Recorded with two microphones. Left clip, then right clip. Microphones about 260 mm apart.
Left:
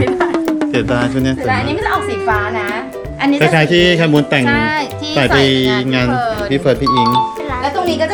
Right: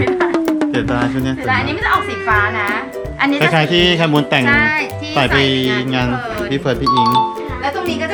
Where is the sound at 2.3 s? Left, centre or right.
Right.